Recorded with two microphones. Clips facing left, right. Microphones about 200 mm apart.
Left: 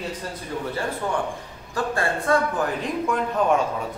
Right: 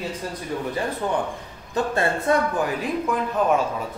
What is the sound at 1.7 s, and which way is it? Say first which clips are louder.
Speech: right 2 dB; 20° right (ahead or behind).